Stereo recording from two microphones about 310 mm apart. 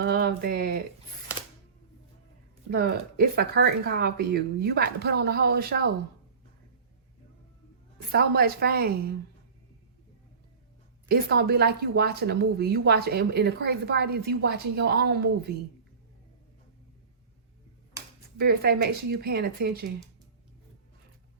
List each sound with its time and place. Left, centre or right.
0.0 s speech: right
2.6 s speech: right
8.1 s a woman's voice: right
11.1 s speech: right
18.3 s speech: right